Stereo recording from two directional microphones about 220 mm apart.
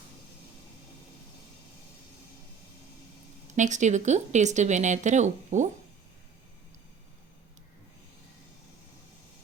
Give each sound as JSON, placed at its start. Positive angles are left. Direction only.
{"t": 3.5, "sound": "speech", "side_deg": -35}